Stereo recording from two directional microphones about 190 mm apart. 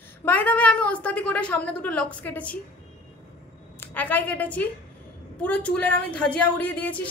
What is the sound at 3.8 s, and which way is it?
A woman's voice, 10° left (ahead or behind).